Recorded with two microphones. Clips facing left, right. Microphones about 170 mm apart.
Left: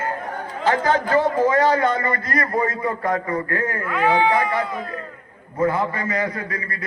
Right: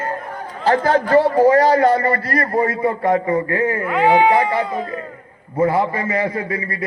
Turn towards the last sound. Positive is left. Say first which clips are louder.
# right 6 dB
turn(degrees=-25)  # may be behind; listen again after turning